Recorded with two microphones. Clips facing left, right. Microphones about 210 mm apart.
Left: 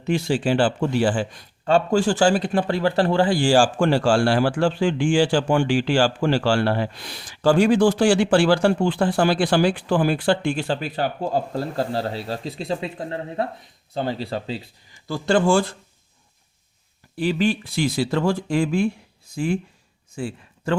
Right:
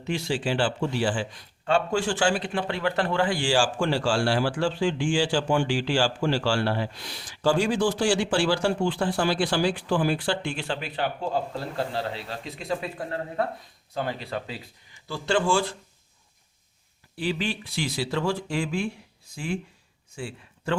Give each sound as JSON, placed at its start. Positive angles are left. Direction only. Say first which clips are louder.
{"t": 0.1, "sound": "a man's voice", "louder": "left 6 dB", "side_deg": 50}
{"t": 15.0, "sound": "a man's voice", "louder": "left 6 dB", "side_deg": 45}
{"t": 17.2, "sound": "a man's voice", "louder": "left 7 dB", "side_deg": 45}
{"t": 20.1, "sound": "a sound", "louder": "left 6 dB", "side_deg": 45}